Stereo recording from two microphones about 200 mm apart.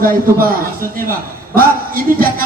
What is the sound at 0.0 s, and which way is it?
Speech, 45° right (ahead or behind).